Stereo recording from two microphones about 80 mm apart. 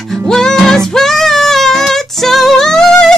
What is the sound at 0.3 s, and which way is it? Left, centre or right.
Music, centre.